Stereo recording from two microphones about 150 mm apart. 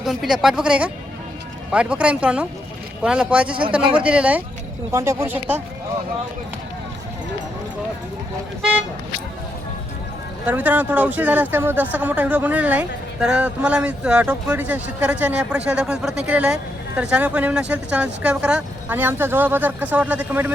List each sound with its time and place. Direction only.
0.0 s speech: centre (ahead or behind)
4.9 s speech: 20° right (ahead or behind)
10.4 s speech: 10° right (ahead or behind)